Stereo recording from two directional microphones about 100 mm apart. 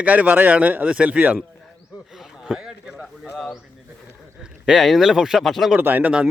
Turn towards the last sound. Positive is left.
turn(degrees=-15)  # may be behind; listen again after turning